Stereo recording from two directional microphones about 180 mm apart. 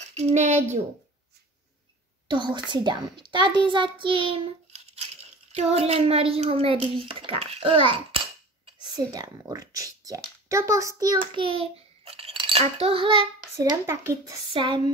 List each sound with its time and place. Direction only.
0.1 s a child's voice: 40° right (ahead or behind)
2.2 s a child's voice: 25° right (ahead or behind)
13.8 s speech: 15° right (ahead or behind)
14.5 s a child's voice: 25° right (ahead or behind)